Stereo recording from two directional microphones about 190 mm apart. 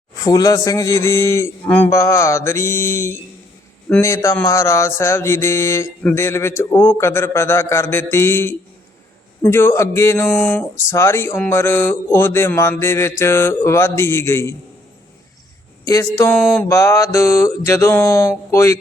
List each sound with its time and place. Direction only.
0.2 s speech: 20° left (ahead or behind)
15.9 s speech: 20° left (ahead or behind)
16.3 s a sound: 5° left (ahead or behind)
16.6 s speech: 15° left (ahead or behind)